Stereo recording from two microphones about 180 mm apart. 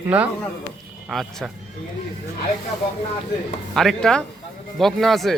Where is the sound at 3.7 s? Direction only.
5° left (ahead or behind).